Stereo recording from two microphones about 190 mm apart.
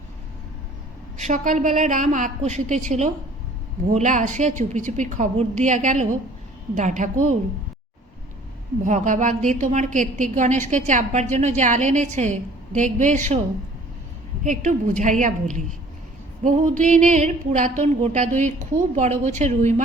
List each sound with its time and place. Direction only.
1.2 s a woman's voice: 40° right (ahead or behind)
8.8 s a woman's voice: 40° right (ahead or behind)
14.4 s a woman's voice: 40° right (ahead or behind)
16.4 s a woman's voice: 40° right (ahead or behind)